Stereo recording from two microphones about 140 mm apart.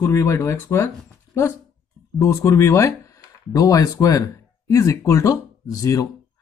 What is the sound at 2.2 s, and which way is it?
Speech, 20° left (ahead or behind).